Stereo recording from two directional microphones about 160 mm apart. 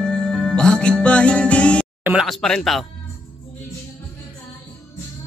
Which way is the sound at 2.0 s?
5° right (ahead or behind).